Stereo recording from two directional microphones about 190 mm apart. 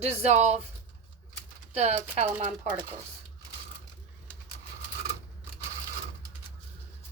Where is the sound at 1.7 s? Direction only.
35° right (ahead or behind).